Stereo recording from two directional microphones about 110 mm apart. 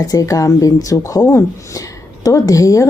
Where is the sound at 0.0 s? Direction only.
30° left (ahead or behind).